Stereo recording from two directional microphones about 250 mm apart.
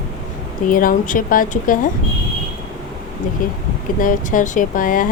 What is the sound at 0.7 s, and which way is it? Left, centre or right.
Speech, left.